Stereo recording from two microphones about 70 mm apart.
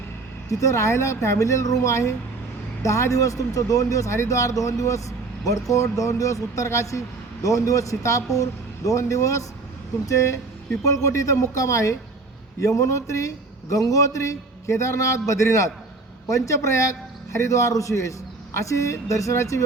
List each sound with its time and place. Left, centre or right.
0.6 s speech: left
10.8 s speech: left